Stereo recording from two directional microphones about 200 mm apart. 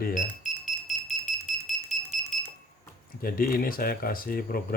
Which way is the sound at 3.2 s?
45° left (ahead or behind).